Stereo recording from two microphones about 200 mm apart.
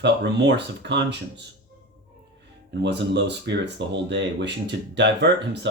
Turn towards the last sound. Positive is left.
turn(degrees=-60)  # may be behind; listen again after turning